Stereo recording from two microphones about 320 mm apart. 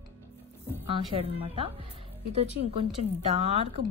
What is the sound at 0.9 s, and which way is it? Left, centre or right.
Speech, centre.